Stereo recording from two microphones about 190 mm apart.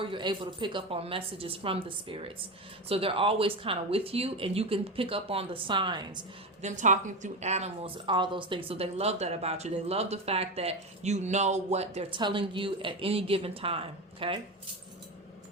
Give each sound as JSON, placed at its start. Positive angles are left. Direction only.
{"t": 0.0, "sound": "speech", "side_deg": -25}
{"t": 6.6, "sound": "a woman's voice", "side_deg": -40}